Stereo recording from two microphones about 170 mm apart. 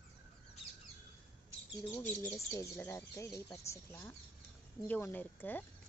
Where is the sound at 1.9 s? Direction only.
15° left (ahead or behind).